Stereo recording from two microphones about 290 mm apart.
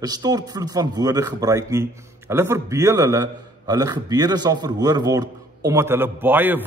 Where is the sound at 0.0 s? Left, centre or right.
Centre.